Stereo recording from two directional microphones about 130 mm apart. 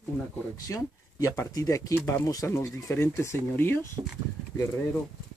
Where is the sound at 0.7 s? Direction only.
25° left (ahead or behind).